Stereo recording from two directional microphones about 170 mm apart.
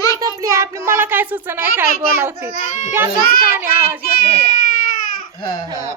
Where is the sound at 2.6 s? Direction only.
45° left (ahead or behind).